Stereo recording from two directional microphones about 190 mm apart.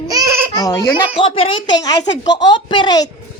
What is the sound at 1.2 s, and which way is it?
A woman's voice, 30° left (ahead or behind).